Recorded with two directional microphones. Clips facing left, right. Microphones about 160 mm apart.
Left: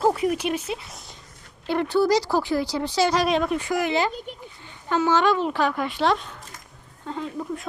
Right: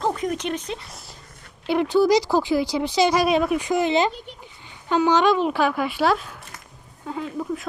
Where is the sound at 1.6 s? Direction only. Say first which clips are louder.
Right 3 dB; 15° right (ahead or behind).